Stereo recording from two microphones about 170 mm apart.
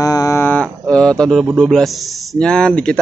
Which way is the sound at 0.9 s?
5° left (ahead or behind).